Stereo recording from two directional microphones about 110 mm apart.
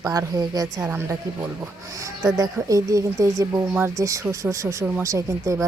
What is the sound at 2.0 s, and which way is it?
Speech, 30° right (ahead or behind).